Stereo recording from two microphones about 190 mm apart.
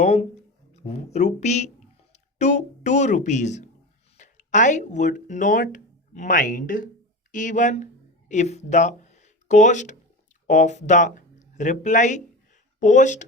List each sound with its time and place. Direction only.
0.0 s a woman's voice: 35° left (ahead or behind)